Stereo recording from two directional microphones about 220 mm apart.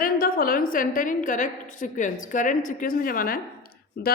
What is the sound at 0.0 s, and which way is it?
A woman's voice, 40° left (ahead or behind).